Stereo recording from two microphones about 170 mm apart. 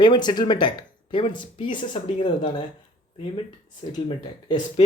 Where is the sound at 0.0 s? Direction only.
25° left (ahead or behind).